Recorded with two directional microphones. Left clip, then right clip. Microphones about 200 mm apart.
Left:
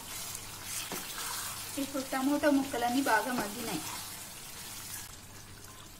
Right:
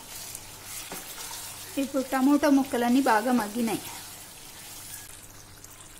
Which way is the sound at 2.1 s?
50° right (ahead or behind).